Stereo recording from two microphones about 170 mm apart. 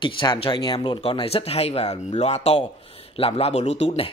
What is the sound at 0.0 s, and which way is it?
Speech, 30° left (ahead or behind).